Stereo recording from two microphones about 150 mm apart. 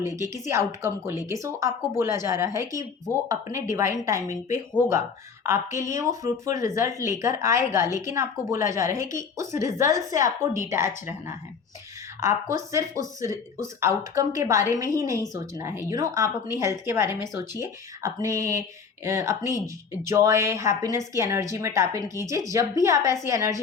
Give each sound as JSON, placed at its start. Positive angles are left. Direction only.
{"t": 0.0, "sound": "a woman's voice", "side_deg": -20}
{"t": 12.5, "sound": "a woman's voice", "side_deg": -20}